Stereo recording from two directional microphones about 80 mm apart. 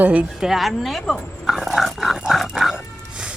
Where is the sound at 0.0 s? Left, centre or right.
Centre.